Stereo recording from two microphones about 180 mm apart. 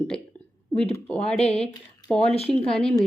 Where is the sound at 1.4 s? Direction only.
35° left (ahead or behind).